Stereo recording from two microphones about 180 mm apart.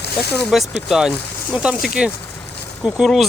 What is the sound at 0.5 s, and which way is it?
Speech, centre (ahead or behind).